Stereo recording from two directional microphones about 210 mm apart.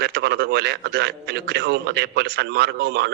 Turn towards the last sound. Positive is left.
turn(degrees=-50)  # may be behind; listen again after turning